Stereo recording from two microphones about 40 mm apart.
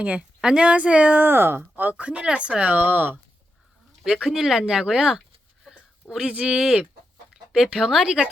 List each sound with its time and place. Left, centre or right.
0.0 s speech: right
1.2 s speech: right
1.7 s speech: right
2.6 s speech: right
4.0 s speech: centre
4.6 s speech: right
7.5 s speech: centre